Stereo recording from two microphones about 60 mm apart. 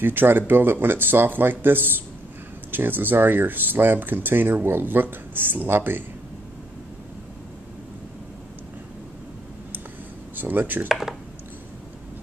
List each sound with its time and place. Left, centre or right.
0.0 s speech: right
10.3 s speech: right
10.9 s a sound: centre